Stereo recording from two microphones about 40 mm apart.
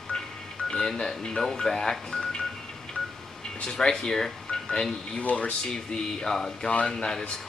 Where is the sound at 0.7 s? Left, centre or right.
Centre.